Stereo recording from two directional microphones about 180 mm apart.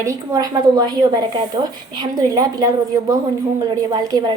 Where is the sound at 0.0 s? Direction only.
20° right (ahead or behind).